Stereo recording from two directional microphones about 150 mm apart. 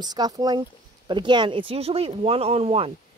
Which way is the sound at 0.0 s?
25° right (ahead or behind).